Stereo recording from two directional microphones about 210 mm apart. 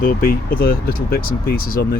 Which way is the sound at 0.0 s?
45° left (ahead or behind).